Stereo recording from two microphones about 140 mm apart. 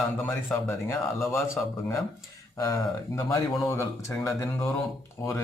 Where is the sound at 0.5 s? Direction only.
5° left (ahead or behind).